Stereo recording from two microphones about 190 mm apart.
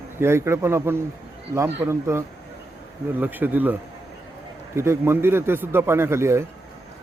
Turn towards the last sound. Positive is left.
turn(degrees=-15)  # may be behind; listen again after turning